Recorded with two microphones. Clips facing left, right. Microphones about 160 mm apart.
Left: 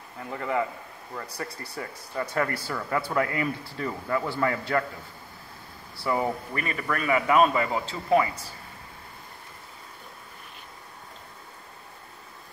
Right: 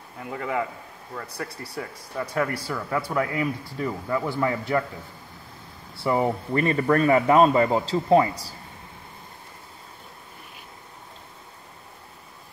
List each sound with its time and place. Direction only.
0.2 s speech: 5° right (ahead or behind)
6.0 s a man's voice: 25° right (ahead or behind)